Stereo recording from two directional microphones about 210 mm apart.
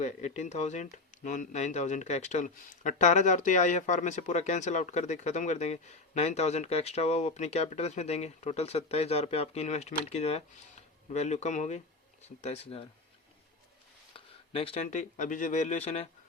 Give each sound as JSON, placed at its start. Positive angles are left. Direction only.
{"t": 0.0, "sound": "speech", "side_deg": 35}
{"t": 14.5, "sound": "speech", "side_deg": 25}